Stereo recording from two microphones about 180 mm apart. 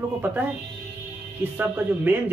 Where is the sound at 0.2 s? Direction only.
10° right (ahead or behind).